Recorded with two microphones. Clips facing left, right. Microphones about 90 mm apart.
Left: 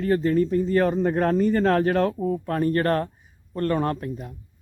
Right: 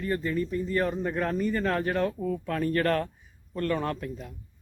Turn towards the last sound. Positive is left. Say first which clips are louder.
# left 5 dB
turn(degrees=40)  # may be behind; listen again after turning